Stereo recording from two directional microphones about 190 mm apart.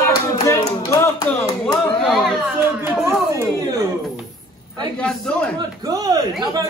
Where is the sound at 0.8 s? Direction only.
15° left (ahead or behind).